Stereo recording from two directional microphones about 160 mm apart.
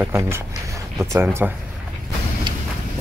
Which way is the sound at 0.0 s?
15° right (ahead or behind).